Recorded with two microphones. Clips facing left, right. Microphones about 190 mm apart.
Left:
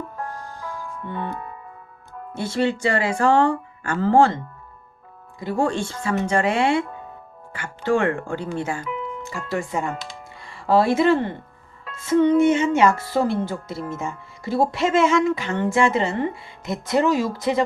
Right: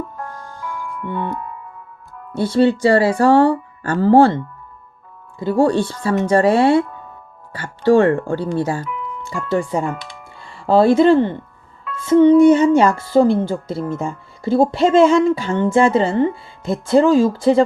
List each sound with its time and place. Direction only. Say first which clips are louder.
0.3 s music: right 2 dB; 35° left (ahead or behind)
2.3 s speech: right 8 dB; 30° right (ahead or behind)
5.4 s speech: right 7 dB; 30° right (ahead or behind)